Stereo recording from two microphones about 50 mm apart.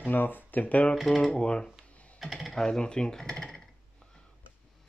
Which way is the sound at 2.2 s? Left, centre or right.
Centre.